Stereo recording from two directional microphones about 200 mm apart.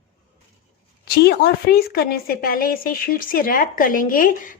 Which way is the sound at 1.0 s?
50° left (ahead or behind).